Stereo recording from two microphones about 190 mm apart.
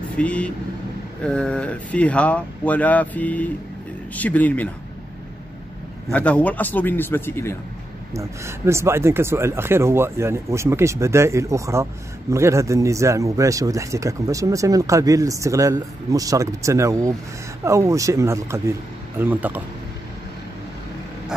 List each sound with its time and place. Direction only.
0.2 s speech: 5° left (ahead or behind)
6.1 s speech: 5° left (ahead or behind)
8.1 s speech: 15° right (ahead or behind)